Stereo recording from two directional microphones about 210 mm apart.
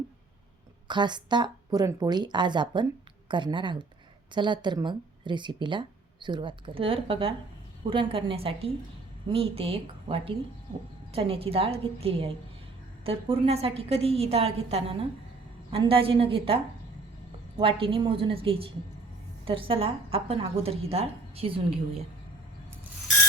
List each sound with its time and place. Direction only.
0.9 s speech: 20° right (ahead or behind)
17.6 s speech: 25° right (ahead or behind)